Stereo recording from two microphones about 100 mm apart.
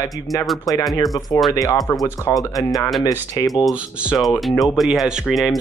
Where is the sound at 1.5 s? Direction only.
35° left (ahead or behind).